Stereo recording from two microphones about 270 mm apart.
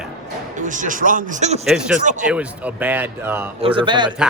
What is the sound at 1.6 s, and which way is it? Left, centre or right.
Speech, centre.